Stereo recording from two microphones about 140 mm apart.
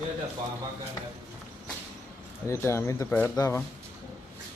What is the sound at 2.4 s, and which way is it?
Speech, 20° left (ahead or behind).